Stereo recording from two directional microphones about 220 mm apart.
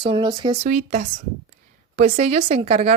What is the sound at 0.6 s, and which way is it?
Speech, 35° right (ahead or behind).